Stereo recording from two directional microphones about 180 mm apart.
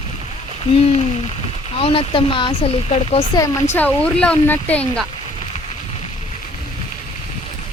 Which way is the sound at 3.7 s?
10° left (ahead or behind).